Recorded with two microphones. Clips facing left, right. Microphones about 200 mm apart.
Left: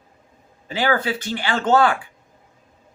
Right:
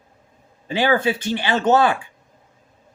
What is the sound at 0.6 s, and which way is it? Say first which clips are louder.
A man's voice: right 3 dB; 25° right (ahead or behind).